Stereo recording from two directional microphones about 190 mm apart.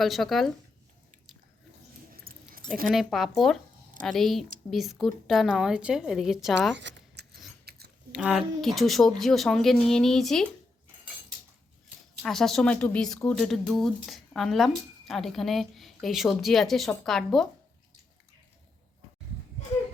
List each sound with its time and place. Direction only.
0.0 s speech: centre (ahead or behind)
2.3 s keys jangling: 50° right (ahead or behind)
2.9 s speech: centre (ahead or behind)
6.7 s scissors: 70° right (ahead or behind)
7.6 s chewing: 55° right (ahead or behind)
8.1 s speech: 5° right (ahead or behind)
12.2 s speech: centre (ahead or behind)